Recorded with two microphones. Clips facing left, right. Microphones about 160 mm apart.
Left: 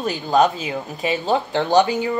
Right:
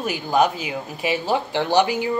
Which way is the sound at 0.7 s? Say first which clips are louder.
Left 1 dB; 10° right (ahead or behind).